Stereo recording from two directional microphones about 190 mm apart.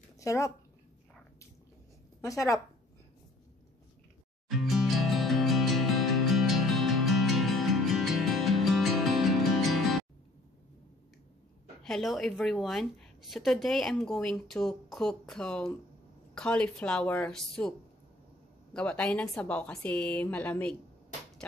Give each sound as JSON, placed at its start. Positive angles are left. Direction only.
{"t": 0.2, "sound": "speech", "side_deg": 15}
{"t": 2.2, "sound": "a woman's voice", "side_deg": 15}
{"t": 4.6, "sound": "music", "side_deg": 0}
{"t": 11.8, "sound": "a woman's voice", "side_deg": 0}